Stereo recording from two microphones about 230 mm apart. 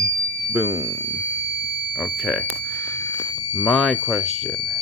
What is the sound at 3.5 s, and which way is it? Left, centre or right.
Speech, centre.